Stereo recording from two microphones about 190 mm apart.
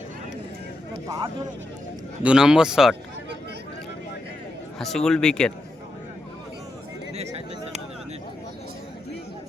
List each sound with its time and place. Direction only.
1.0 s speech: 15° right (ahead or behind)
2.2 s speech: 5° right (ahead or behind)
4.8 s speech: centre (ahead or behind)